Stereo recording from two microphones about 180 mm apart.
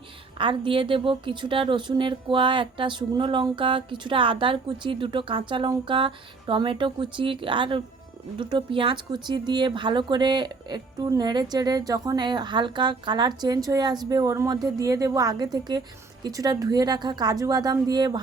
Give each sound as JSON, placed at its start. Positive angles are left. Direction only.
{"t": 0.3, "sound": "a woman's voice", "side_deg": -30}